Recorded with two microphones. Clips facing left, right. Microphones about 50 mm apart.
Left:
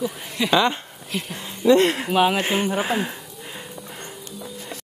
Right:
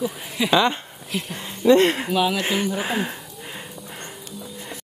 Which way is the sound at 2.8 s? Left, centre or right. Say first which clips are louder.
Left 1 dB; centre.